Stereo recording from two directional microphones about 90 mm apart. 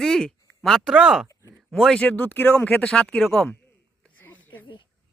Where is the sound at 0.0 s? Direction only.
5° left (ahead or behind).